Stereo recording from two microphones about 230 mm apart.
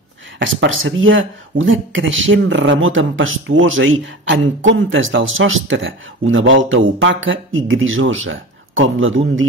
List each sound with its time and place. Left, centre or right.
0.4 s speech: right